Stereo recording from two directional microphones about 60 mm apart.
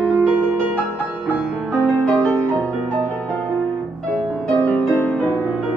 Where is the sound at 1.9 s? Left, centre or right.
Left.